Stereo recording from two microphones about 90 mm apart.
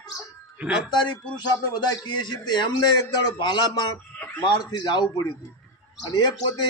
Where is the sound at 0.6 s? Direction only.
10° right (ahead or behind).